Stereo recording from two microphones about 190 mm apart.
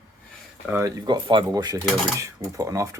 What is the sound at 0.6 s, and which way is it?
Speech, 10° right (ahead or behind).